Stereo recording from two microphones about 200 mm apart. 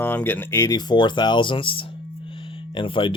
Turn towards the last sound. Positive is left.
turn(degrees=25)  # may be behind; listen again after turning